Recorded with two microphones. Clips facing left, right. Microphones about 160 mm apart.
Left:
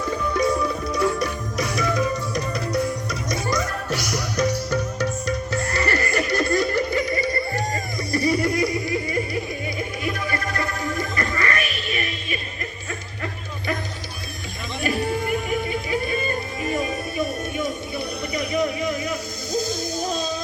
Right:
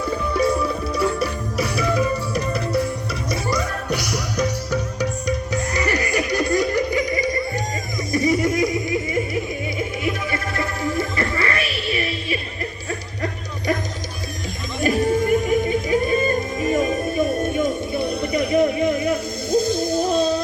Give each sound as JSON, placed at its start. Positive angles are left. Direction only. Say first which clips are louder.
{"t": 0.3, "sound": "music", "louder": "right 2 dB", "side_deg": -5}
{"t": 14.8, "sound": "music", "louder": "right 5 dB", "side_deg": -40}